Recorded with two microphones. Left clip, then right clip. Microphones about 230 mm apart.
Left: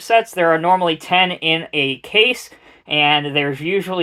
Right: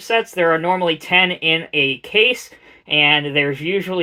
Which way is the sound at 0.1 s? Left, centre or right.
Left.